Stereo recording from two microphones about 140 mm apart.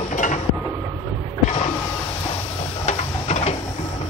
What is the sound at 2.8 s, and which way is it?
Printer, 55° left (ahead or behind).